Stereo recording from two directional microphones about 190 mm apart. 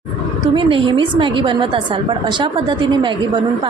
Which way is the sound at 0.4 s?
25° right (ahead or behind).